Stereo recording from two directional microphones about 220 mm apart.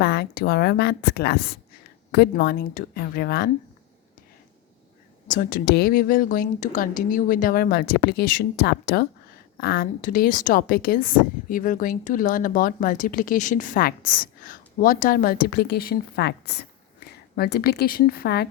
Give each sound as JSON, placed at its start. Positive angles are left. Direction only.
{"t": 0.0, "sound": "a woman's voice", "side_deg": 45}
{"t": 5.3, "sound": "speech", "side_deg": 40}